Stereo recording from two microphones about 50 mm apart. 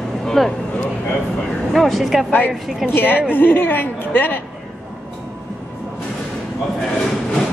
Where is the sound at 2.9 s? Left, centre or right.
Left.